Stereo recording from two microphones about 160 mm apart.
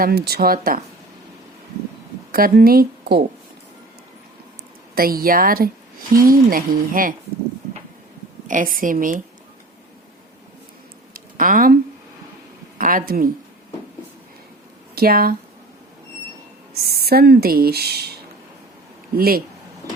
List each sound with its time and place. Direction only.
0.0 s speech: 80° right
2.3 s speech: 70° right (ahead or behind)
4.9 s speech: 65° right (ahead or behind)
8.4 s speech: 55° right (ahead or behind)
11.1 s a sound: 60° right (ahead or behind)
12.8 s speech: 60° right (ahead or behind)
14.9 s speech: 70° right (ahead or behind)
16.8 s speech: 75° right (ahead or behind)
19.1 s speech: 70° right (ahead or behind)